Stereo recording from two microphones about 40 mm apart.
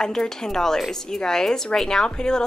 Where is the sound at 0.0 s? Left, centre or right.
Centre.